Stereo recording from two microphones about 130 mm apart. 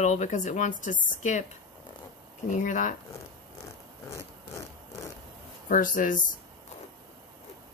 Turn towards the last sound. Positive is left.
turn(degrees=90)